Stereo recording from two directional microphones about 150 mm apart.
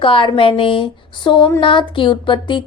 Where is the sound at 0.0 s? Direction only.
35° left (ahead or behind).